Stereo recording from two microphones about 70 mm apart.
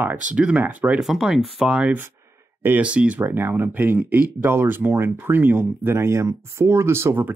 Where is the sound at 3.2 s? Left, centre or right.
Right.